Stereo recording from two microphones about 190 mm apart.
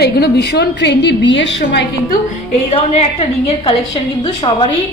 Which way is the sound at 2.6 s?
35° left (ahead or behind).